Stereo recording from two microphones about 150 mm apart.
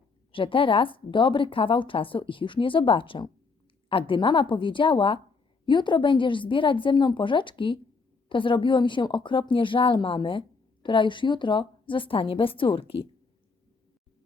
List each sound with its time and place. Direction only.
0.3 s a woman's voice: 35° left (ahead or behind)